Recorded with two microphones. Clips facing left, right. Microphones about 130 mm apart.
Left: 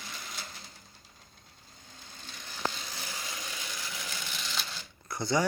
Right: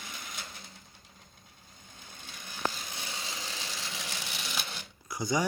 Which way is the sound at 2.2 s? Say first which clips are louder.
Right 1 dB; 15° right (ahead or behind).